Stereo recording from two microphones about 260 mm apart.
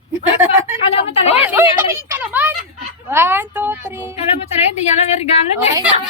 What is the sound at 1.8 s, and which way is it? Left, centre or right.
A woman's voice, centre.